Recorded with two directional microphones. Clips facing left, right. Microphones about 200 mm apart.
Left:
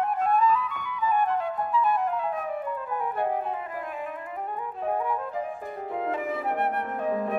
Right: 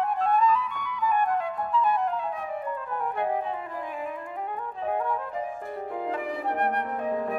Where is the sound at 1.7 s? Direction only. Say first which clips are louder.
Even; 5° left (ahead or behind).